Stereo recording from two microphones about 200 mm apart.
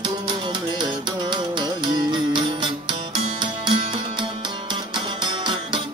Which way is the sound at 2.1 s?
20° right (ahead or behind).